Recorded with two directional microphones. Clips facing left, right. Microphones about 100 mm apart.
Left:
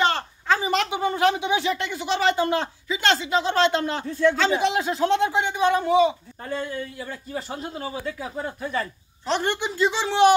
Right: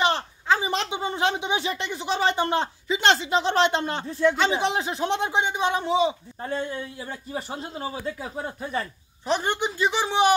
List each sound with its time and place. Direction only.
0.0 s speech: 20° right (ahead or behind)